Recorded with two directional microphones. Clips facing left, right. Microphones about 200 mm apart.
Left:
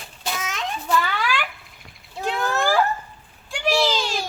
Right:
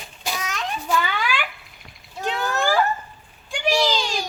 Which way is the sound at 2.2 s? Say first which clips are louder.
Left 1 dB; 5° left (ahead or behind).